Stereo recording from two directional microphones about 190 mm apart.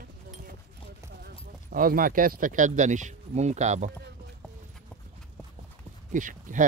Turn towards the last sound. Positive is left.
turn(degrees=-45)  # may be behind; listen again after turning